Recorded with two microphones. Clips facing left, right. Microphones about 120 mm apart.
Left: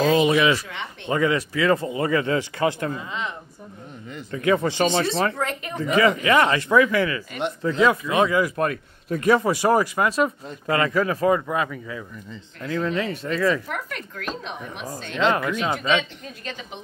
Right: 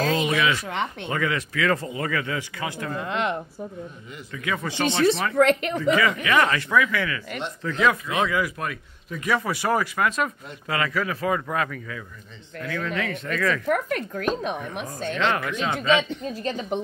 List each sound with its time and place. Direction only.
0.0 s a sound: 25° left (ahead or behind)
1.0 s speech: 25° left (ahead or behind)
3.0 s a woman's voice: 80° right
4.3 s speech: 35° left (ahead or behind)
5.3 s a woman's voice: 70° right (ahead or behind)
5.8 s speech: 35° left (ahead or behind)
11.5 s speech: 20° left (ahead or behind)
12.6 s speech: 30° left (ahead or behind)
13.7 s a woman's voice: 45° right (ahead or behind)
15.3 s speech: 25° left (ahead or behind)
16.0 s a woman's voice: 35° right (ahead or behind)